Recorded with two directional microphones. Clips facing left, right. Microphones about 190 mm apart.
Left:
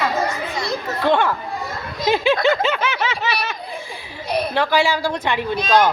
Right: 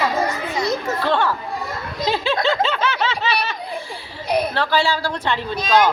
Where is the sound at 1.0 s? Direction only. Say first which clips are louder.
Left 4 dB; 15° left (ahead or behind).